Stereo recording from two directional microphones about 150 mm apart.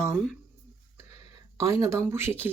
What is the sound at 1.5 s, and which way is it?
Speech, 20° right (ahead or behind).